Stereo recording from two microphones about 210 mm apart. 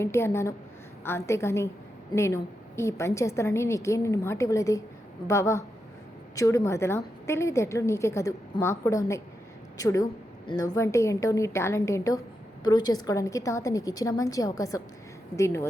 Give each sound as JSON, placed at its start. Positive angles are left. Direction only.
{"t": 0.0, "sound": "a woman's voice", "side_deg": 10}